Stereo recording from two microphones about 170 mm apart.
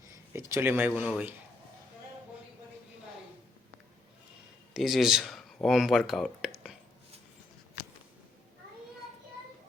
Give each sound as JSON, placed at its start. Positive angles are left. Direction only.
{"t": 0.3, "sound": "speech", "side_deg": -15}
{"t": 4.7, "sound": "speech", "side_deg": 0}